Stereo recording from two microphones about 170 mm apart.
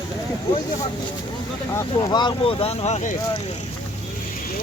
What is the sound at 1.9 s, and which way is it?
Speech, 30° left (ahead or behind).